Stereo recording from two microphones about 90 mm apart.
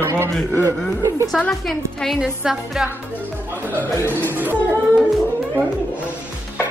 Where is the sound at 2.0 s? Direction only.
5° right (ahead or behind).